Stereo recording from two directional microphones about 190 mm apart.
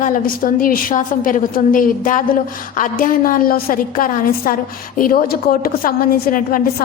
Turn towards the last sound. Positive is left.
turn(degrees=50)  # may be behind; listen again after turning